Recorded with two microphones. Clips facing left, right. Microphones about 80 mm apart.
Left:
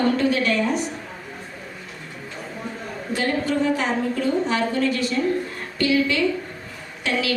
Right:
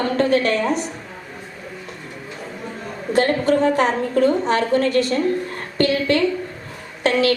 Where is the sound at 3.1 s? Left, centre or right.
Right.